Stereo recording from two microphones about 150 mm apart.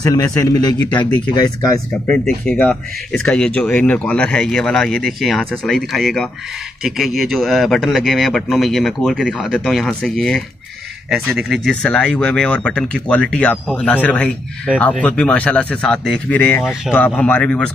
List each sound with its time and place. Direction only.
0.0 s a man's voice: 25° left (ahead or behind)
2.0 s speech: 10° left (ahead or behind)